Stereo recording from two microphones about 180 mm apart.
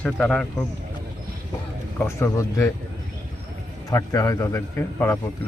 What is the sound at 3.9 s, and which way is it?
Speech, 15° left (ahead or behind).